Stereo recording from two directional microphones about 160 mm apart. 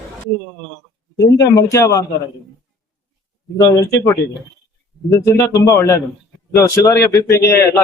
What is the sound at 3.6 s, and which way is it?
A man's voice, 20° left (ahead or behind).